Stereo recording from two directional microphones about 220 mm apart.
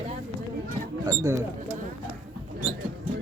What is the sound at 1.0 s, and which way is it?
Speech, 15° right (ahead or behind).